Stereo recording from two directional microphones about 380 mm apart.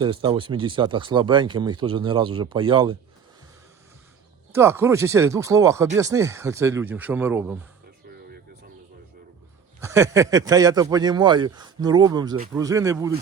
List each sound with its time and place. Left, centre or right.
0.0 s speech: centre
4.5 s speech: centre
9.8 s speech: centre